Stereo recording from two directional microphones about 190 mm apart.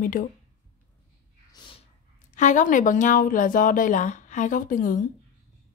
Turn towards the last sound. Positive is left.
turn(degrees=45)  # may be behind; listen again after turning